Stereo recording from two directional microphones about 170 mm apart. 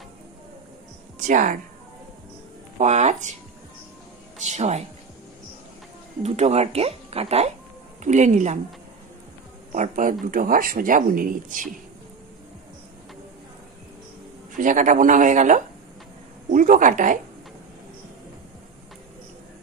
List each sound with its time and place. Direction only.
1.2 s a woman's voice: 50° right (ahead or behind)
2.8 s speech: 45° right (ahead or behind)
4.4 s a woman's voice: 45° right (ahead or behind)
6.2 s speech: 40° right (ahead or behind)
9.7 s speech: 50° right (ahead or behind)
14.6 s speech: 50° right (ahead or behind)